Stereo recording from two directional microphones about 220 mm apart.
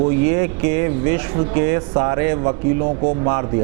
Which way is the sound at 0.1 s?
15° right (ahead or behind).